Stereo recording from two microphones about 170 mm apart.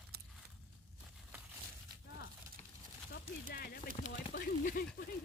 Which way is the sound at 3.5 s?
60° left (ahead or behind).